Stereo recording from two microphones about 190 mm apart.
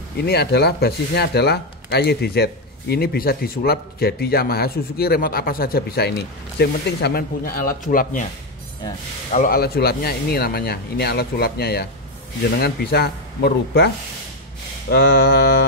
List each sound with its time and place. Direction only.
0.2 s speech: 55° left (ahead or behind)
9.3 s speech: 50° left (ahead or behind)
14.9 s speech: 60° left (ahead or behind)